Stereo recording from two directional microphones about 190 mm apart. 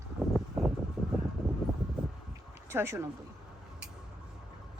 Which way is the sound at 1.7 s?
Centre (ahead or behind).